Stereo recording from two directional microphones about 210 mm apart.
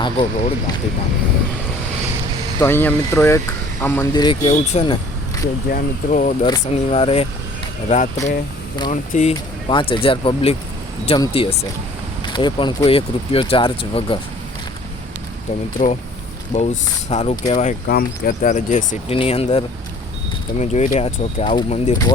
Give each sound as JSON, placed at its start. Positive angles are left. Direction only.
{"t": 0.0, "sound": "speech", "side_deg": 20}
{"t": 2.6, "sound": "speech", "side_deg": 10}
{"t": 5.6, "sound": "speech", "side_deg": 40}
{"t": 6.4, "sound": "speech", "side_deg": 25}
{"t": 15.8, "sound": "speech", "side_deg": 40}
{"t": 17.1, "sound": "speech", "side_deg": 30}
{"t": 17.8, "sound": "speech", "side_deg": 45}